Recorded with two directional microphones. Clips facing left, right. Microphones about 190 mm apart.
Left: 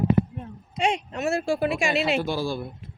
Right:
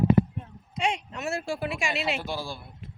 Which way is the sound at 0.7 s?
30° left (ahead or behind).